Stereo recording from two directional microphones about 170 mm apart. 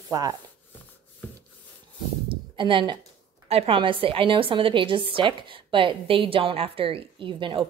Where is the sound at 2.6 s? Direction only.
30° right (ahead or behind).